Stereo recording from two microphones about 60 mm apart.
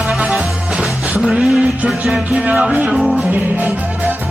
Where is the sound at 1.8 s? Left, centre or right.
Centre.